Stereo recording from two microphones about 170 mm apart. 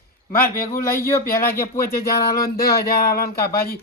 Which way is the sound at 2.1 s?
65° left (ahead or behind).